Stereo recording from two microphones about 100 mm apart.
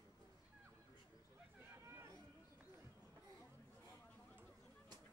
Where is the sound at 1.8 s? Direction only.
25° right (ahead or behind).